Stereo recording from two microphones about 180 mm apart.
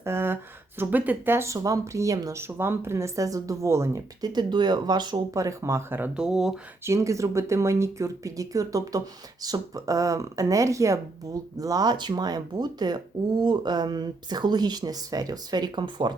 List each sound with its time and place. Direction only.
0.0 s a sound: 15° right (ahead or behind)
0.8 s speech: 10° right (ahead or behind)
6.8 s speech: 15° right (ahead or behind)